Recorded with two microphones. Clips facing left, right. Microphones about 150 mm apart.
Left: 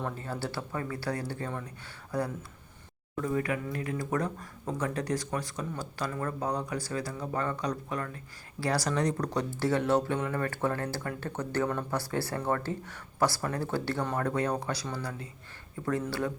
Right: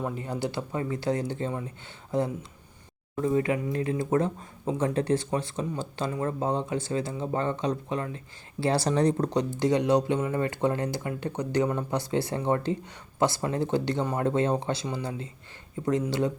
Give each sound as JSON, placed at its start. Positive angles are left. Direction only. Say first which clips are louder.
{"t": 0.0, "sound": "speech", "louder": "right 4 dB", "side_deg": -15}